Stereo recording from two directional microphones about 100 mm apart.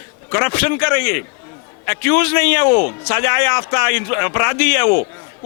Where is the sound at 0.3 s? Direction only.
25° left (ahead or behind).